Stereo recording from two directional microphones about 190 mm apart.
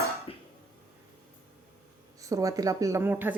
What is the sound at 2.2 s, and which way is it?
Speech, 15° right (ahead or behind).